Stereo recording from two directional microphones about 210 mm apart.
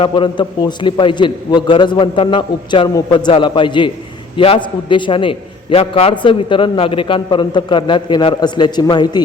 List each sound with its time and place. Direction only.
0.0 s a man's voice: 25° left (ahead or behind)